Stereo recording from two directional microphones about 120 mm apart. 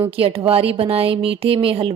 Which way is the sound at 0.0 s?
50° right (ahead or behind).